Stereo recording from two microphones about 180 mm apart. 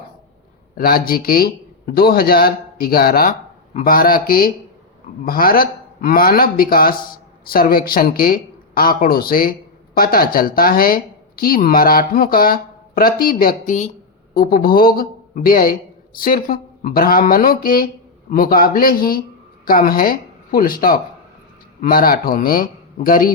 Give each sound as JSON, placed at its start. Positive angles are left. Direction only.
{"t": 0.8, "sound": "a man's voice", "side_deg": 55}